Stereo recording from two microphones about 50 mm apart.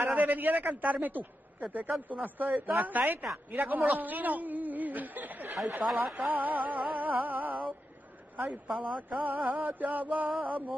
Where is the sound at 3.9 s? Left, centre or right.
Right.